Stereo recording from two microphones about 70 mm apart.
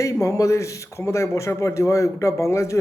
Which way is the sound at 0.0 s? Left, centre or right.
Left.